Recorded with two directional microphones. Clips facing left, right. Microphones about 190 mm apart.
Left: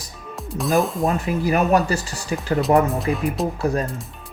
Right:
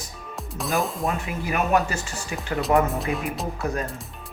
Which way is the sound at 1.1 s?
35° left (ahead or behind).